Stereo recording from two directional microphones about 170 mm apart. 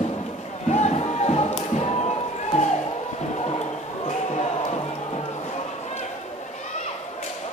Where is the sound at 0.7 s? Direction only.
40° left (ahead or behind).